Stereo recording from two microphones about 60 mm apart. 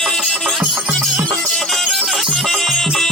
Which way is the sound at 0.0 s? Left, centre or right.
Centre.